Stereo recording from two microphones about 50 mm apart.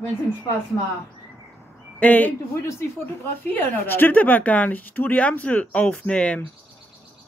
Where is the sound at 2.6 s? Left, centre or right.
Left.